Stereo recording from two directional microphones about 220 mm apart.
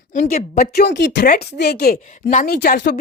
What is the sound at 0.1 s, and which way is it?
A woman's voice, 35° left (ahead or behind).